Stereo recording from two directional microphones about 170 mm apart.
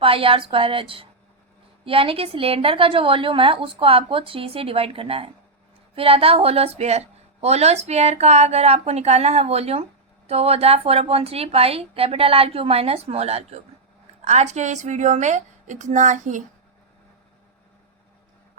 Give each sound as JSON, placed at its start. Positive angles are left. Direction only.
{"t": 0.0, "sound": "a woman's voice", "side_deg": -35}